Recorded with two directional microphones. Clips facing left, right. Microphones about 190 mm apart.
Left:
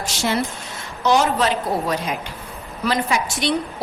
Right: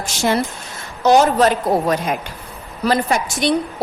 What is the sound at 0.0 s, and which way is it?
A woman's voice, 50° right (ahead or behind).